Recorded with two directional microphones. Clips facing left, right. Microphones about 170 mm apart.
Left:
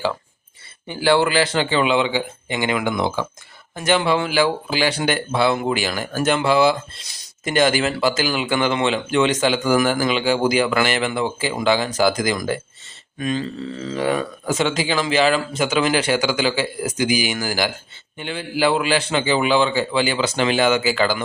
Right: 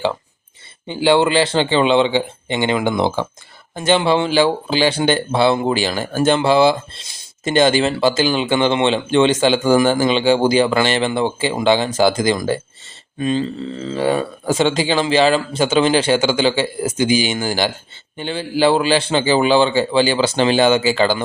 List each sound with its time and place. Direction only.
0.9 s a man's voice: 20° right (ahead or behind)